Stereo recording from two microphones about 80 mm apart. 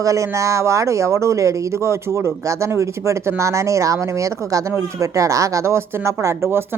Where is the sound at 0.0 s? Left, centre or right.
Right.